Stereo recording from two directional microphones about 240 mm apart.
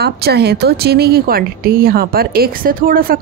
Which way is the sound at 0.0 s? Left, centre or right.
Right.